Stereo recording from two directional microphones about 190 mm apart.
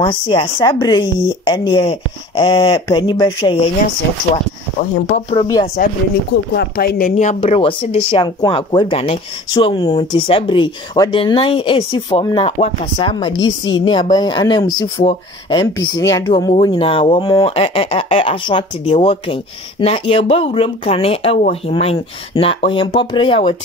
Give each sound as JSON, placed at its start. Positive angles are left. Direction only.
{"t": 0.0, "sound": "speech", "side_deg": 25}
{"t": 5.3, "sound": "speech", "side_deg": 25}
{"t": 6.5, "sound": "speech", "side_deg": 55}